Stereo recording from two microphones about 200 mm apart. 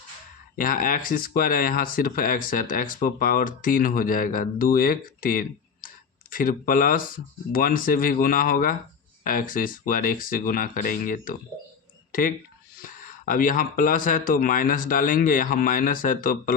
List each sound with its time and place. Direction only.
0.5 s speech: 45° left (ahead or behind)
12.8 s speech: 45° left (ahead or behind)